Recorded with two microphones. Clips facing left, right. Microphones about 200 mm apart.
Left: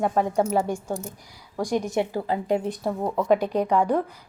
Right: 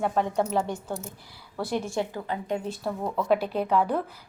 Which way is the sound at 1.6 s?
15° left (ahead or behind).